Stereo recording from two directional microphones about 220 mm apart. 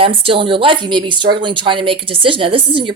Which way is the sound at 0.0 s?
25° right (ahead or behind).